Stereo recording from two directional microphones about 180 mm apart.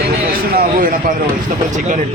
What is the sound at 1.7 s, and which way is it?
Speech, 40° right (ahead or behind).